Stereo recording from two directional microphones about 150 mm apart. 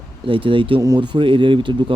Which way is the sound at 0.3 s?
35° right (ahead or behind).